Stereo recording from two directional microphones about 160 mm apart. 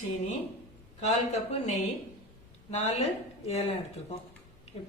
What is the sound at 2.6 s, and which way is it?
Speech, 40° left (ahead or behind).